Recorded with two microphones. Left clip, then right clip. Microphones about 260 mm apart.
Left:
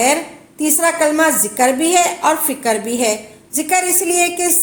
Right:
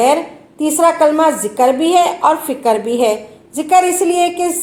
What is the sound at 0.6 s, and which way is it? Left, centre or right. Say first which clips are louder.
A woman's voice: right 4 dB; left.